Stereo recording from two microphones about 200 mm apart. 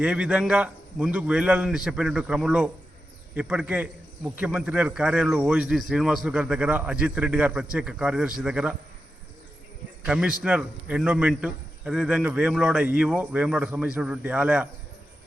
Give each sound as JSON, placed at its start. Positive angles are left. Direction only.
{"t": 0.0, "sound": "a man's voice", "side_deg": -5}
{"t": 10.0, "sound": "a man's voice", "side_deg": -5}